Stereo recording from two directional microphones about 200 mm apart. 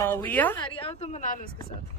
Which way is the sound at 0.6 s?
30° left (ahead or behind).